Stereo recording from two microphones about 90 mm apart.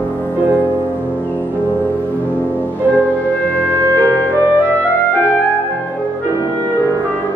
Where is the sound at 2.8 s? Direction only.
15° left (ahead or behind).